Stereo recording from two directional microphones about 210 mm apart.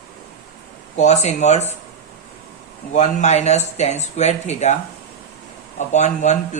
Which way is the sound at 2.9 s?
35° left (ahead or behind).